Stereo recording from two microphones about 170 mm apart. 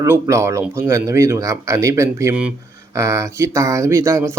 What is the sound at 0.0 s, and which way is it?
Speech, 15° right (ahead or behind).